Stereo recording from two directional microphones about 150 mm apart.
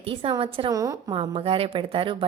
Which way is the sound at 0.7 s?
25° right (ahead or behind).